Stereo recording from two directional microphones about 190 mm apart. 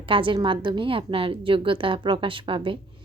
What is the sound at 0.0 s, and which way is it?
A woman's voice, 25° right (ahead or behind).